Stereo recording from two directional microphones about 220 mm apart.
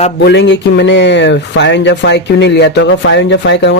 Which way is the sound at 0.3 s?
55° left (ahead or behind).